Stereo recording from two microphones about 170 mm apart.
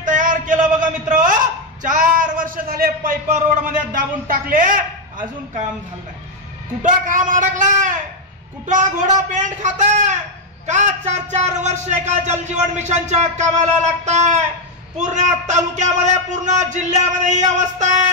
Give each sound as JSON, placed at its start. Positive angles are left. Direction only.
{"t": 0.0, "sound": "a sound", "side_deg": -50}
{"t": 1.8, "sound": "a man's voice", "side_deg": -50}
{"t": 6.8, "sound": "a man's voice", "side_deg": -50}